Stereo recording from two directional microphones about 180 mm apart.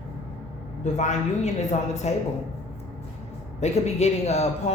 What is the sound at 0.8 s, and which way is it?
Speech, 40° left (ahead or behind).